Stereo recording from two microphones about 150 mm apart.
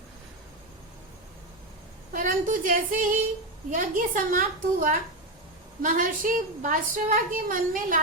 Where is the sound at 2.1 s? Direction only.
60° right (ahead or behind).